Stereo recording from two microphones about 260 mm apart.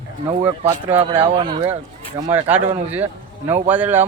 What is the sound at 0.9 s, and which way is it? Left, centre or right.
Speech, right.